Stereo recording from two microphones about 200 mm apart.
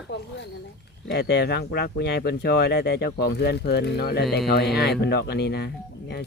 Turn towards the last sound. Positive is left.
turn(degrees=55)  # may be behind; listen again after turning